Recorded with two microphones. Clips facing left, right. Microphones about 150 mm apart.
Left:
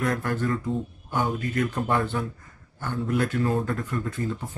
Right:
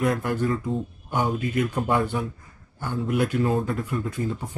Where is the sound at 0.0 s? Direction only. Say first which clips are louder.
Right 2 dB; 15° right (ahead or behind).